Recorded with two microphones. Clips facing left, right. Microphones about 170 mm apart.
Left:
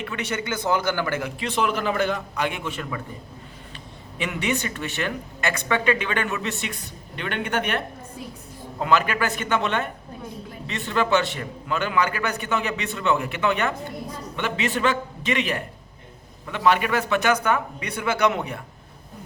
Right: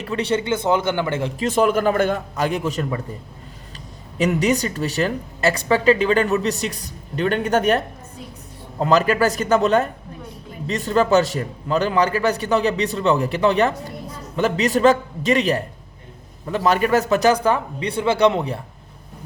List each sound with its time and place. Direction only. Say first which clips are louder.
0.0 s speech: right 7 dB; 30° right (ahead or behind)
1.4 s a man's voice: right 9 dB; 45° right (ahead or behind)
4.2 s speech: right 8 dB; 40° right (ahead or behind)
8.8 s speech: right 5 dB; 40° right (ahead or behind)